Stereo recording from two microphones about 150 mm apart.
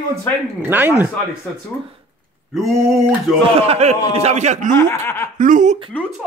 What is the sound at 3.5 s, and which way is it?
A man's voice, 45° right (ahead or behind).